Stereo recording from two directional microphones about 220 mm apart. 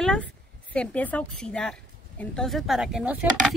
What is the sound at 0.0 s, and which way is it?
A woman's voice, 5° left (ahead or behind).